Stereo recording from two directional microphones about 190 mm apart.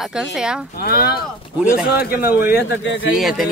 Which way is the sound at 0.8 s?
55° left (ahead or behind).